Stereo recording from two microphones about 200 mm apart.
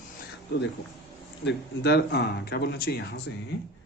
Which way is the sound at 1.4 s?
55° left (ahead or behind).